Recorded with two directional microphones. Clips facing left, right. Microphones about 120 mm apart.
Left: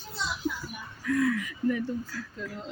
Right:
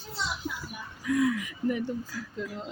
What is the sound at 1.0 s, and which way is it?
A woman's voice, 15° right (ahead or behind).